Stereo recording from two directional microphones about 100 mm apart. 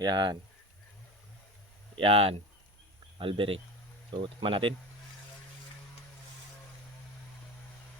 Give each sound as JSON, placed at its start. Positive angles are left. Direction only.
{"t": 0.0, "sound": "speech", "side_deg": -45}
{"t": 2.0, "sound": "speech", "side_deg": -70}
{"t": 4.1, "sound": "speech", "side_deg": -55}